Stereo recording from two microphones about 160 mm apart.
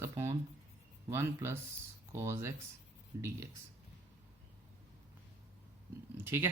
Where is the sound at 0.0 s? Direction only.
15° right (ahead or behind).